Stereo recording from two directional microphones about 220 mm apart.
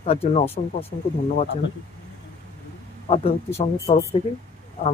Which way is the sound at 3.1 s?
30° left (ahead or behind).